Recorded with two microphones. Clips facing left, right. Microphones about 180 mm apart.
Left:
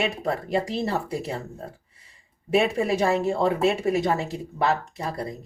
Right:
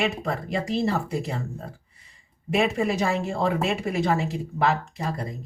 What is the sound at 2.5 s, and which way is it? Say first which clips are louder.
Speech: left 1 dB; 35° left (ahead or behind).